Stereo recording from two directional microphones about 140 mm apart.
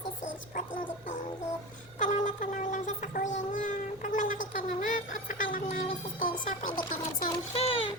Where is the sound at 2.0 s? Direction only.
60° left (ahead or behind).